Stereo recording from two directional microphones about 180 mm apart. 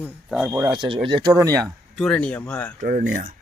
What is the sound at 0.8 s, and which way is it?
Speech, 30° right (ahead or behind).